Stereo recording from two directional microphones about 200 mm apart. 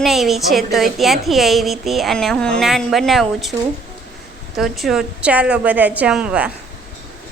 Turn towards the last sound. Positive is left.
turn(degrees=-5)  # may be behind; listen again after turning